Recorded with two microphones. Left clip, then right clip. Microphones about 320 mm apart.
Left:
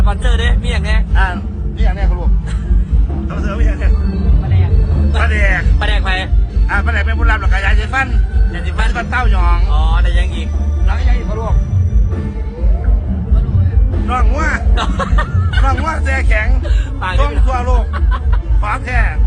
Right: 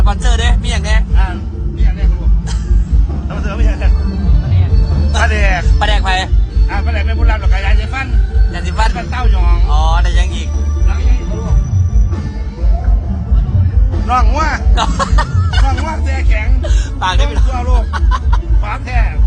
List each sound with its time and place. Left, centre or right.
0.0 s speech: centre
3.2 s a sound: centre
5.1 s music: right
5.8 s music: centre
6.7 s speech: centre
14.1 s speech: right
14.8 s music: centre
15.6 s speech: centre